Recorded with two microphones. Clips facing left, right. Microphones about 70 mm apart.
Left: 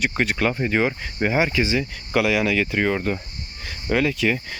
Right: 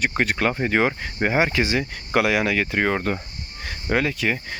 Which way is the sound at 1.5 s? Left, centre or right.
Right.